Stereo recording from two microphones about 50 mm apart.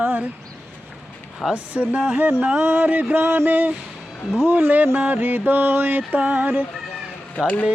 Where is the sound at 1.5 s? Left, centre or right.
Right.